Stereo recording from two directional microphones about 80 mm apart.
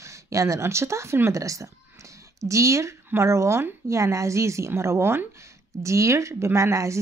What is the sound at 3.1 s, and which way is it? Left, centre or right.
Speech, right.